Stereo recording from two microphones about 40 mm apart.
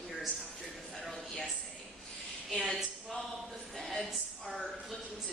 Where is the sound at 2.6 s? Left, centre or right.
Centre.